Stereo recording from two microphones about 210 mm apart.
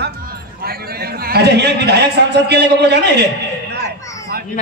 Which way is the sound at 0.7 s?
45° right (ahead or behind).